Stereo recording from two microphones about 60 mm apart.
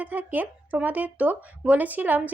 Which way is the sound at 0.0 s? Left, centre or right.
Right.